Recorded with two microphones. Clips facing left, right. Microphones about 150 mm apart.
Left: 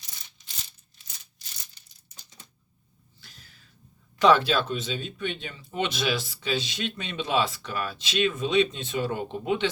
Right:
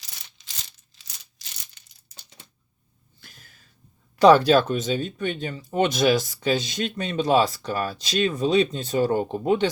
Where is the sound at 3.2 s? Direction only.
50° right (ahead or behind).